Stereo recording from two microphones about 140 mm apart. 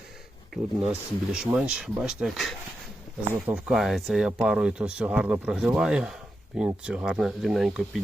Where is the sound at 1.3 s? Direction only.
5° right (ahead or behind).